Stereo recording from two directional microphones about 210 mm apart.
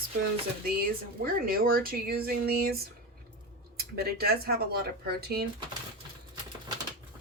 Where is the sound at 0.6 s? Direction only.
45° right (ahead or behind).